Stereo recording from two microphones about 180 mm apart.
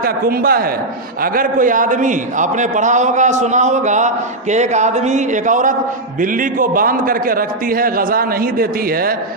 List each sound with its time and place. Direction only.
0.0 s a man's voice: 55° right (ahead or behind)